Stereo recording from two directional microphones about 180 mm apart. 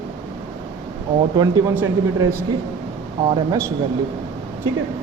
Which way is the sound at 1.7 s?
15° right (ahead or behind).